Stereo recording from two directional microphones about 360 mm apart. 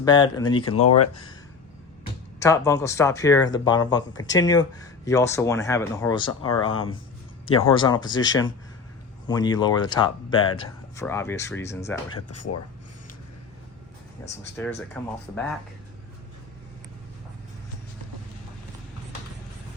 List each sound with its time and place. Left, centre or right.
0.0 s speech: centre
0.8 s speech: left
2.0 s speech: centre
7.7 s speech: centre
12.3 s speech: left
14.2 s speech: centre